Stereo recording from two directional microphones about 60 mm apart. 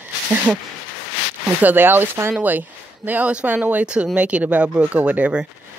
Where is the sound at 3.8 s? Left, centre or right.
Centre.